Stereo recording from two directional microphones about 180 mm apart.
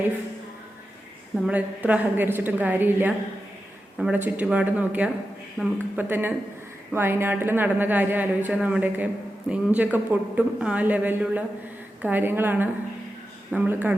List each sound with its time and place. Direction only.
1.4 s speech: 10° right (ahead or behind)